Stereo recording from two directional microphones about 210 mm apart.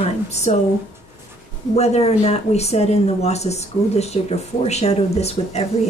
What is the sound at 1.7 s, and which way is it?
Speech, 30° left (ahead or behind).